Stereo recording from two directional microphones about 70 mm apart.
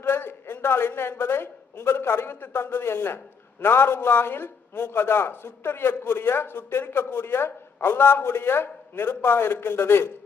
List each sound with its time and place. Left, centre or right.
0.0 s a woman's voice: left